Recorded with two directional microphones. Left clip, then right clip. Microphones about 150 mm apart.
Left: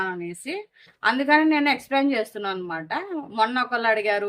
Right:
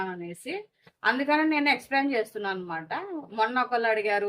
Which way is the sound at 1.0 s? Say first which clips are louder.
Left 5 dB; 50° left (ahead or behind).